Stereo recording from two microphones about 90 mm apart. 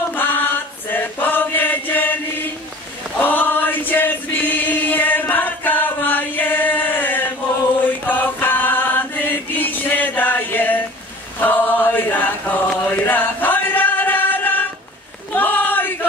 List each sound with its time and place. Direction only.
0.1 s chant: 20° left (ahead or behind)
3.2 s choir: 20° left (ahead or behind)
7.9 s chant: 20° left (ahead or behind)
15.3 s a sound: 20° left (ahead or behind)